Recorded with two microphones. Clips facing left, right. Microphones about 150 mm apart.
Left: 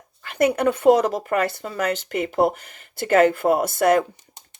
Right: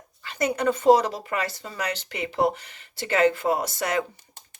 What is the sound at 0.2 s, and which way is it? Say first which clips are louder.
Speech: left 6 dB; 55° left (ahead or behind).